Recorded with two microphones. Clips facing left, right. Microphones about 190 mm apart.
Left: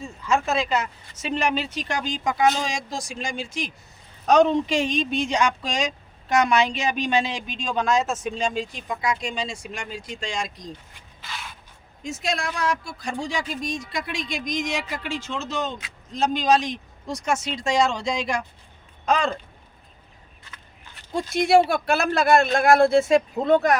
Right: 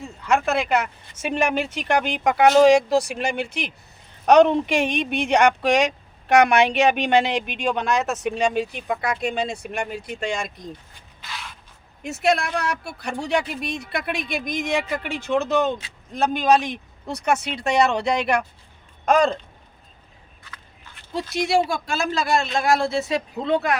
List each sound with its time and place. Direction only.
0.0 s speech: 60° right (ahead or behind)
11.2 s a sound: centre (ahead or behind)
12.0 s speech: 65° right (ahead or behind)
19.0 s speech: 45° right (ahead or behind)
21.1 s a man's voice: 50° left (ahead or behind)